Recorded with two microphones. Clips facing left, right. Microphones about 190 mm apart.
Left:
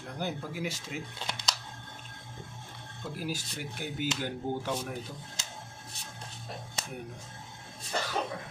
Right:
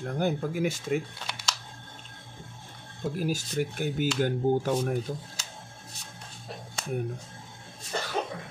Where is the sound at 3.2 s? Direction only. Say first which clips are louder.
Right 8 dB; 50° right (ahead or behind).